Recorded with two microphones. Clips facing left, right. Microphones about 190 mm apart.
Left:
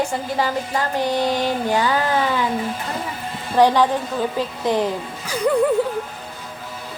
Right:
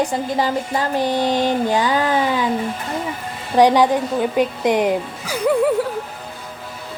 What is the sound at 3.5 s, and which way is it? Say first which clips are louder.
Speech: right 2 dB; 15° right (ahead or behind).